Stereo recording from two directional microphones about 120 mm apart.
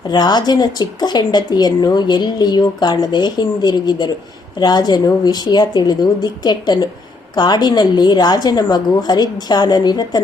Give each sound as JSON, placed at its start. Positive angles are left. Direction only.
{"t": 0.1, "sound": "speech", "side_deg": 35}